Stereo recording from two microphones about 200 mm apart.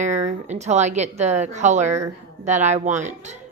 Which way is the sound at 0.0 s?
35° right (ahead or behind).